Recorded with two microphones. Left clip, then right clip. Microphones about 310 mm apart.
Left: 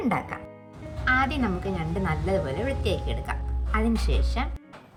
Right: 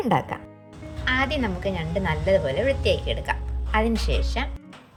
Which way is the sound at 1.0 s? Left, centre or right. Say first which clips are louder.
Even; centre.